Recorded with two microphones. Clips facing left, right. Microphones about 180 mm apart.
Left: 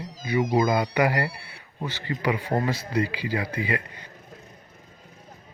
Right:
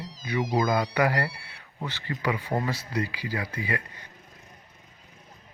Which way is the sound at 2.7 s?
25° left (ahead or behind).